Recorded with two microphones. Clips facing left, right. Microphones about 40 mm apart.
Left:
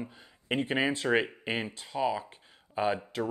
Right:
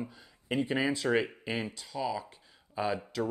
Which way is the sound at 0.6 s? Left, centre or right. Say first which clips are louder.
Even; left.